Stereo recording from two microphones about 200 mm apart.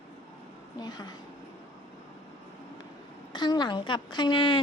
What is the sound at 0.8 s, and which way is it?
Speech, 20° left (ahead or behind).